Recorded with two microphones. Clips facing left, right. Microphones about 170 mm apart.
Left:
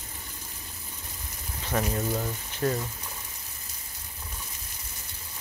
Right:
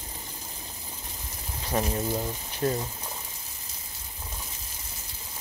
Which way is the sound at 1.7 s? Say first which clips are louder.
Even; 25° right (ahead or behind).